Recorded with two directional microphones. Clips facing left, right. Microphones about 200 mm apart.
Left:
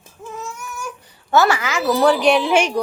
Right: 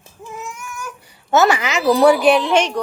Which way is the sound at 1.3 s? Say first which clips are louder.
Right 1 dB; 20° right (ahead or behind).